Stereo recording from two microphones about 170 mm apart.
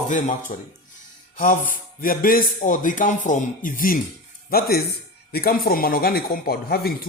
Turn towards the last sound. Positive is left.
turn(degrees=65)  # may be behind; listen again after turning